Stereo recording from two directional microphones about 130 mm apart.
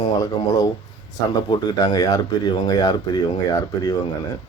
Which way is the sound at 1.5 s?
35° left (ahead or behind).